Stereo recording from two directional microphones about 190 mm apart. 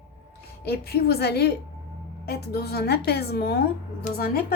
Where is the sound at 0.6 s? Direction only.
55° left (ahead or behind).